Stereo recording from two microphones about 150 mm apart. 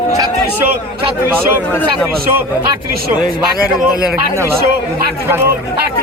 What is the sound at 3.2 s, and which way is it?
Speech, 75° right (ahead or behind).